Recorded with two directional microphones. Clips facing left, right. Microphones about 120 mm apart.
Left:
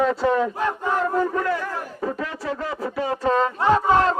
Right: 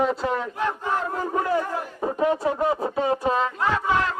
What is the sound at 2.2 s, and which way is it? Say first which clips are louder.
Music: right 7 dB; 20° right (ahead or behind).